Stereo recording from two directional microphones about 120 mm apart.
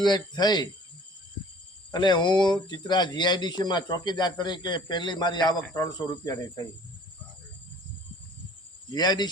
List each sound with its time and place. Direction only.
0.0 s speech: 35° left (ahead or behind)
1.9 s speech: 40° left (ahead or behind)
8.9 s speech: 35° left (ahead or behind)